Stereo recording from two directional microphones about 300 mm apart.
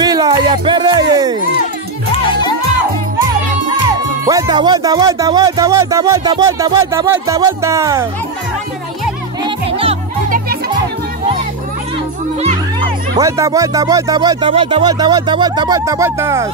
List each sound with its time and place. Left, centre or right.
0.0 s speech: centre
4.3 s speech: centre
9.4 s music: centre
13.1 s speech: centre